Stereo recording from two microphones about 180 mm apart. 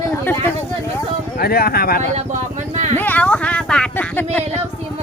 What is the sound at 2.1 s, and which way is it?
Speech, 40° right (ahead or behind).